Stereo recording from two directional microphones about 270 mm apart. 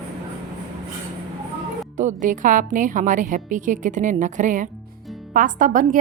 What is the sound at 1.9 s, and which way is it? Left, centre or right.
A woman's voice, right.